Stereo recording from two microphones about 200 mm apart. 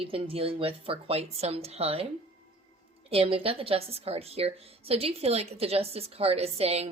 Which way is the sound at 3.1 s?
25° right (ahead or behind).